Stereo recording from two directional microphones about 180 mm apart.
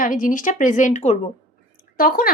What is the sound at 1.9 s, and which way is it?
Speech, 55° left (ahead or behind).